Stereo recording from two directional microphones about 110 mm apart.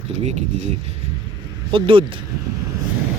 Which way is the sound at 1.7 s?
55° right (ahead or behind).